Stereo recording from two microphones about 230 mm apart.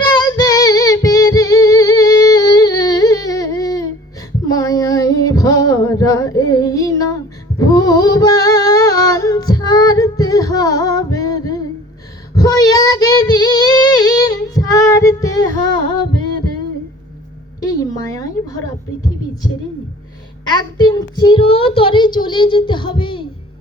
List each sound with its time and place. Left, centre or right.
0.1 s music: centre
4.4 s female singing: centre
12.3 s child singing: centre
17.6 s a sound: centre
20.5 s child singing: centre